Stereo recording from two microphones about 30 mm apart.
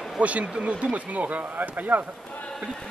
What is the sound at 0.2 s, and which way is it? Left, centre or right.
Speech, right.